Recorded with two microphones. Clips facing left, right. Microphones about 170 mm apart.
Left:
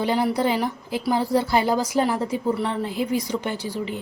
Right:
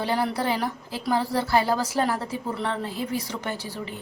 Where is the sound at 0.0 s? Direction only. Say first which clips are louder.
Left 4 dB; 15° left (ahead or behind).